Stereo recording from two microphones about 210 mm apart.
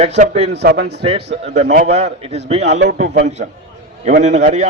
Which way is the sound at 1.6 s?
35° right (ahead or behind).